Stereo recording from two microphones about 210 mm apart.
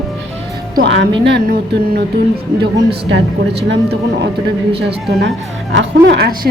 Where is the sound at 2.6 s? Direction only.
55° right (ahead or behind).